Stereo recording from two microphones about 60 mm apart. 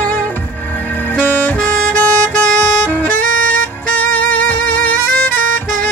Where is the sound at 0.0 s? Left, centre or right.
Left.